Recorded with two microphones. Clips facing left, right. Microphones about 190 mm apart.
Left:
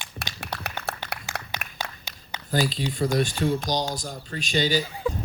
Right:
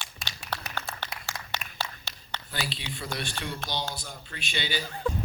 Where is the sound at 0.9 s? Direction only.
65° left (ahead or behind).